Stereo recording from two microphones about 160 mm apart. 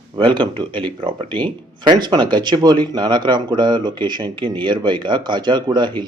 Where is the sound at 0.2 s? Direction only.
30° right (ahead or behind).